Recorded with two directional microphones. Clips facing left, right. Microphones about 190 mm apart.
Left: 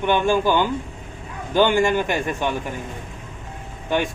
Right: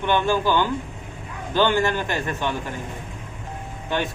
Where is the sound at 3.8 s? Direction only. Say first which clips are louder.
Left 3 dB; 15° left (ahead or behind).